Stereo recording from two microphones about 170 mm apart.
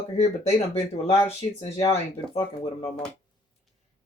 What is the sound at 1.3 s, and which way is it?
Speech, 35° left (ahead or behind).